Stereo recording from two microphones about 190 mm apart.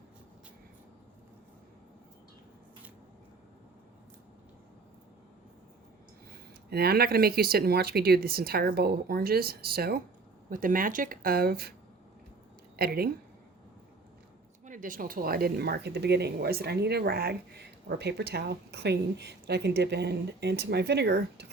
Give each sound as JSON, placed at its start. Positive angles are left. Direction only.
{"t": 6.7, "sound": "speech", "side_deg": -55}
{"t": 12.7, "sound": "speech", "side_deg": -55}
{"t": 14.6, "sound": "speech", "side_deg": -45}